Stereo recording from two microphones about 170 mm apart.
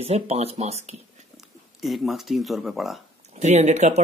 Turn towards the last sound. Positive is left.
turn(degrees=-45)  # may be behind; listen again after turning